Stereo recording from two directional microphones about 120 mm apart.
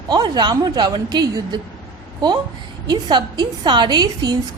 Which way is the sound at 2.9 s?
40° right (ahead or behind).